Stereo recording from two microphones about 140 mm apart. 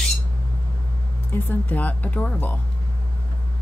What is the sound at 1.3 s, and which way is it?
Speech, 10° left (ahead or behind).